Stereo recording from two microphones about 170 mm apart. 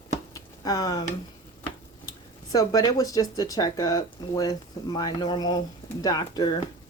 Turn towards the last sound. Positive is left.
turn(degrees=25)  # may be behind; listen again after turning